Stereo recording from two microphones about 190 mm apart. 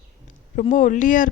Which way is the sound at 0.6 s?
40° left (ahead or behind).